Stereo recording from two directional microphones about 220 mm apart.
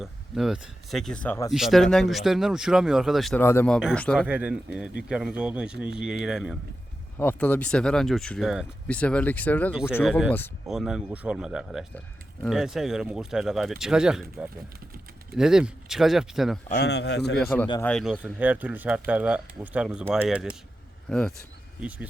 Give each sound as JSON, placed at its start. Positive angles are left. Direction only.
{"t": 0.0, "sound": "speech", "side_deg": 0}
{"t": 1.5, "sound": "speech", "side_deg": 0}
{"t": 4.3, "sound": "speech", "side_deg": -5}
{"t": 16.7, "sound": "a man's voice", "side_deg": 50}
{"t": 17.3, "sound": "speech", "side_deg": 5}